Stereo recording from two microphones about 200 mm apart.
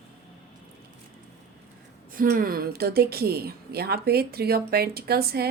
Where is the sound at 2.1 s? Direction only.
45° right (ahead or behind).